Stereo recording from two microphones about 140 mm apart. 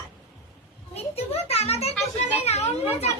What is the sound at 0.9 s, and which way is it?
A child's voice, 45° left (ahead or behind).